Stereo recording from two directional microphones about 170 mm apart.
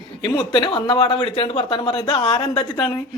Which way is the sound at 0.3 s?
25° left (ahead or behind).